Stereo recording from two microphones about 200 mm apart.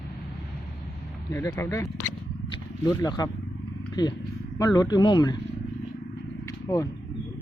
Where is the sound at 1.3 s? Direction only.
15° left (ahead or behind).